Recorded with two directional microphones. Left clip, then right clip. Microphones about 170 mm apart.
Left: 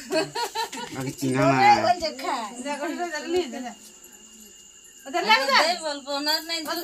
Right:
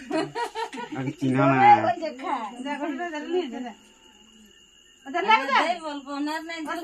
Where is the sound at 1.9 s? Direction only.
10° right (ahead or behind).